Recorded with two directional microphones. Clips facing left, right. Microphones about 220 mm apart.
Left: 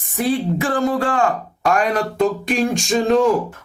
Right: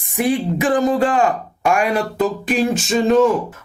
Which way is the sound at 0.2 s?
15° right (ahead or behind).